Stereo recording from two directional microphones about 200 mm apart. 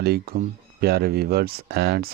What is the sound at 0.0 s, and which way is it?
Speech, 50° right (ahead or behind).